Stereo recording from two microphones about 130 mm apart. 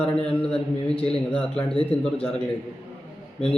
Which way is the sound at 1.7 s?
50° left (ahead or behind).